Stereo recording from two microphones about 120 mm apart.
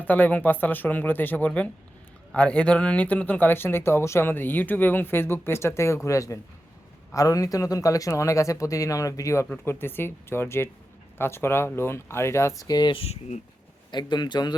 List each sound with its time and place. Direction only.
0.0 s speech: 15° left (ahead or behind); by 13.0 s 35° left (ahead or behind)
13.0 s speech: 65° left (ahead or behind)
13.9 s a man's voice: 40° left (ahead or behind)